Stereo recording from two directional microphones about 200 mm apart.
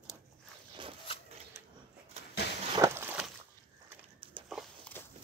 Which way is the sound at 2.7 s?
15° right (ahead or behind).